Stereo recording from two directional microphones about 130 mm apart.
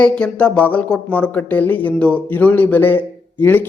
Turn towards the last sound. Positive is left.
turn(degrees=15)  # may be behind; listen again after turning